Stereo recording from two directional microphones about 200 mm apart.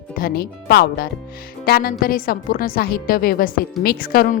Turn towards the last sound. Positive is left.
turn(degrees=45)  # may be behind; listen again after turning